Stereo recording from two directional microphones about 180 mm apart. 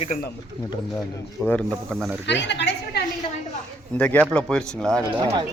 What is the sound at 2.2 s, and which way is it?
Speech, 75° left (ahead or behind).